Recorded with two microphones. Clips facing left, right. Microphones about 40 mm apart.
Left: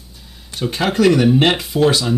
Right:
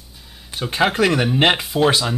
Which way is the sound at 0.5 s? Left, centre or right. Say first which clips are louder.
Right 1 dB; centre.